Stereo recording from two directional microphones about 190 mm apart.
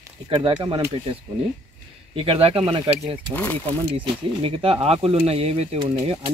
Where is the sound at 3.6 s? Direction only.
30° right (ahead or behind).